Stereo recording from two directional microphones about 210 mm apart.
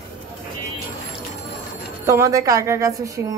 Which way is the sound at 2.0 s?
15° right (ahead or behind).